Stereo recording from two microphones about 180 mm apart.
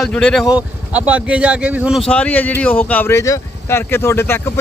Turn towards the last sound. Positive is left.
turn(degrees=15)  # may be behind; listen again after turning